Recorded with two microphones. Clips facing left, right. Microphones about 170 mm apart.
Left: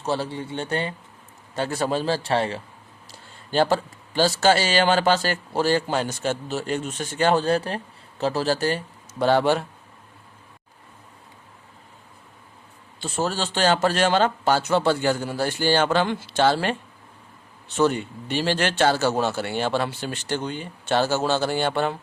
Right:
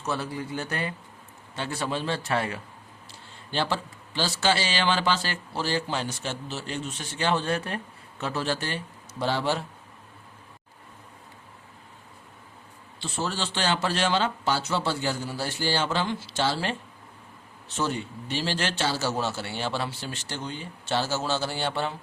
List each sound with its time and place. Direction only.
0.0 s a man's voice: 30° left (ahead or behind)
1.5 s a man's voice: 40° left (ahead or behind)
3.1 s a man's voice: 45° left (ahead or behind)
9.1 s a man's voice: 55° left (ahead or behind)
13.0 s a man's voice: 45° left (ahead or behind)
17.7 s a man's voice: 60° left (ahead or behind)